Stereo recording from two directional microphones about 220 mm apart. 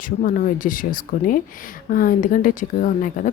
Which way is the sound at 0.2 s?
40° left (ahead or behind).